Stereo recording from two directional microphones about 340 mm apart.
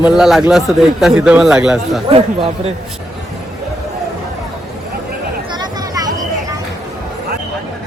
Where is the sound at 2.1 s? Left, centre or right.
Centre.